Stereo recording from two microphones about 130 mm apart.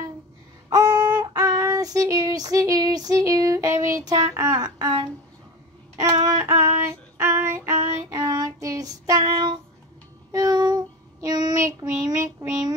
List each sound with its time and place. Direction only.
0.7 s child singing: 30° right (ahead or behind)